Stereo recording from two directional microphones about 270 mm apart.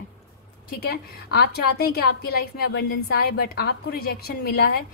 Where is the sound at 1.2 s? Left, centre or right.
Left.